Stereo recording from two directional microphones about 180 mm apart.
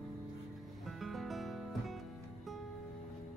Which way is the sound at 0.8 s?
Centre (ahead or behind).